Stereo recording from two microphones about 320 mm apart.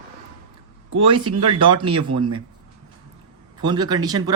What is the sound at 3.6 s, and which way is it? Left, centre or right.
Speech, centre.